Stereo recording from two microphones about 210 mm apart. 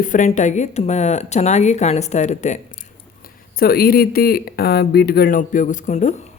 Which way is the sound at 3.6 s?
45° left (ahead or behind).